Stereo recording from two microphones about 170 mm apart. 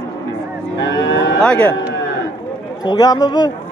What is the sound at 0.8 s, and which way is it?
Cattle, 90° left.